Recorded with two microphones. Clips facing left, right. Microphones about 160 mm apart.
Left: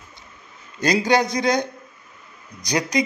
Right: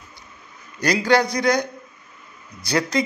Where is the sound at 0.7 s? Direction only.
20° left (ahead or behind).